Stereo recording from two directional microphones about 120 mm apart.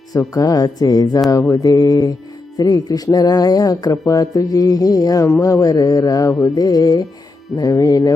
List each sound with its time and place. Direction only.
0.1 s speech: 30° left (ahead or behind)
1.3 s mantra: 25° left (ahead or behind)
2.6 s speech: 30° left (ahead or behind)